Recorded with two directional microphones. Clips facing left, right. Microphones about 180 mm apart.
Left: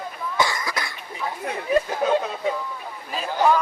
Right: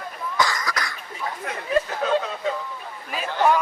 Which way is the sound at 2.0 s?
10° left (ahead or behind).